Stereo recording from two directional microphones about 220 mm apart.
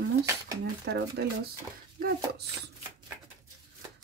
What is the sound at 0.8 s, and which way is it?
Speech, 50° right (ahead or behind).